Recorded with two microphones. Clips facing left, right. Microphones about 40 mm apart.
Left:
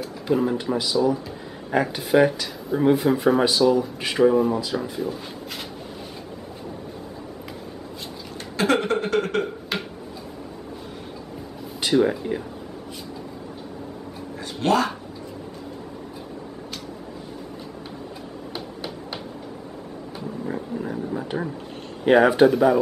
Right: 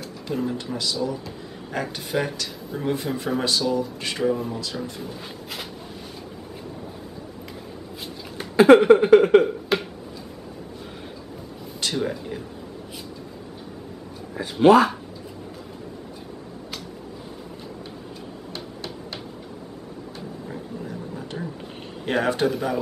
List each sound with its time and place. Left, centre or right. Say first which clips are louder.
0.0 s speech: left 5 dB; centre
8.4 s a sound: right 9 dB; centre
11.8 s speech: left 7 dB; centre
14.3 s a sound: right 7 dB; centre
18.5 s hammer: left 2 dB; centre
20.4 s roaring cats: left 7 dB; left
22.0 s speech: left 7 dB; centre